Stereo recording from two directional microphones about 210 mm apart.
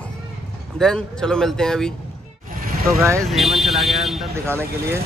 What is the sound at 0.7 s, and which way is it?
Speech, centre (ahead or behind).